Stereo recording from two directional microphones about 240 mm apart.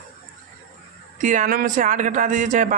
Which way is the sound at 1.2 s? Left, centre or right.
Right.